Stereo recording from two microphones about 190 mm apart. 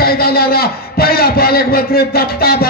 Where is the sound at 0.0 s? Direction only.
55° left (ahead or behind).